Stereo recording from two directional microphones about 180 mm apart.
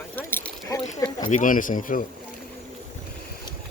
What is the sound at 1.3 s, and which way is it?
Speech, 50° left (ahead or behind).